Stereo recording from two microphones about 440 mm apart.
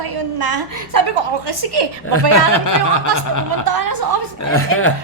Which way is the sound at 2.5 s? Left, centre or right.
Left.